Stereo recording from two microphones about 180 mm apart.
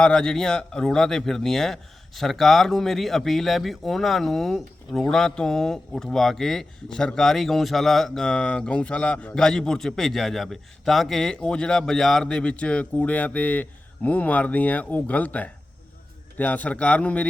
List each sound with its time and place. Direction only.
0.0 s a man's voice: 5° left (ahead or behind)